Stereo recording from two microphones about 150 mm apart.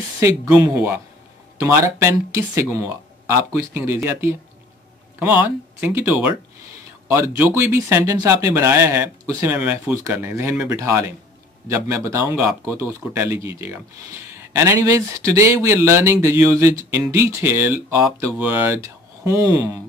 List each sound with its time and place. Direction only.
0.2 s speech: 10° right (ahead or behind)